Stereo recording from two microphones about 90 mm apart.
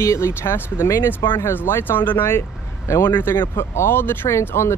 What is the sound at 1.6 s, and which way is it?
Speech, 25° left (ahead or behind).